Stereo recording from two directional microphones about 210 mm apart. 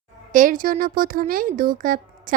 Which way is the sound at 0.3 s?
40° right (ahead or behind).